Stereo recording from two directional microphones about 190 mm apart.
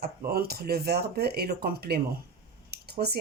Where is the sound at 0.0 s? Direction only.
55° right (ahead or behind).